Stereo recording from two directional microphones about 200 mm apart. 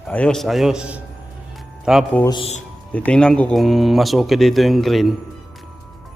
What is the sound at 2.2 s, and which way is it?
Speech, 20° left (ahead or behind).